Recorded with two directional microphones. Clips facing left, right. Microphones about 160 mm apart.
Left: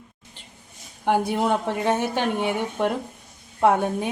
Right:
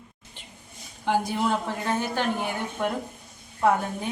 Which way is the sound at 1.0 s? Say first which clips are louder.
Left 3 dB; 60° left (ahead or behind).